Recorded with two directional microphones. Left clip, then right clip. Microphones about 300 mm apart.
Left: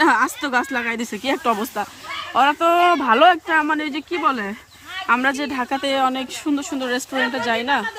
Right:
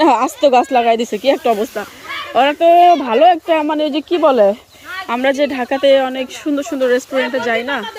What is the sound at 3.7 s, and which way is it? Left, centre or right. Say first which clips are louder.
Speech: right 6 dB; centre.